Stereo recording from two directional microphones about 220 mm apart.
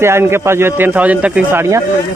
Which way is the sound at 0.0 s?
10° right (ahead or behind).